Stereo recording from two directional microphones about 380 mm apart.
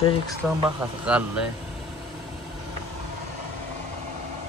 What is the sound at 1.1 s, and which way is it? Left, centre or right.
Speech, centre.